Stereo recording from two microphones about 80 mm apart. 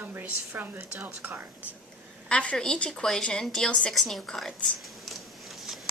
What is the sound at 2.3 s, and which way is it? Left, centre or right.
A woman's voice, centre.